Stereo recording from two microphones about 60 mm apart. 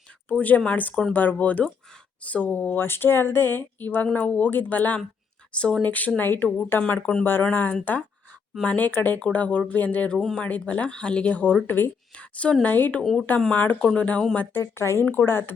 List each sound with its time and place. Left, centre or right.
0.3 s speech: left
11.6 s speech: left
12.1 s a woman's voice: left
13.0 s speech: centre
13.5 s speech: left
14.6 s speech: left
15.1 s speech: left